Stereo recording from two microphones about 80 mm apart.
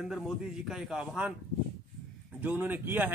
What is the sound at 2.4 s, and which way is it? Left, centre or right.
Speech, right.